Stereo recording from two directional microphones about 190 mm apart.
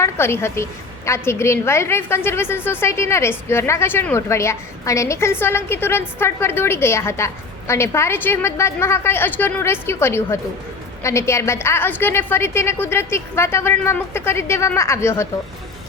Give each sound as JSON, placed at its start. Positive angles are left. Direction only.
{"t": 0.0, "sound": "a woman's voice", "side_deg": 15}